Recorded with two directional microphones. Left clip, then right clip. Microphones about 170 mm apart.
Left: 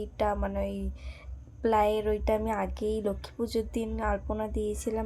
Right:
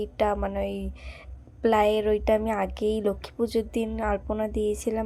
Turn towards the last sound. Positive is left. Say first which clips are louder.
# right 5 dB
turn(degrees=-15)  # may be behind; listen again after turning